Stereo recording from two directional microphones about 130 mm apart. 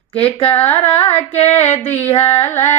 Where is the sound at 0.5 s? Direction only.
15° left (ahead or behind).